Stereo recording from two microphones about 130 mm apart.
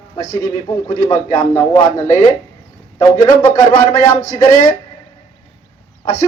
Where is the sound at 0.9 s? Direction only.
25° left (ahead or behind).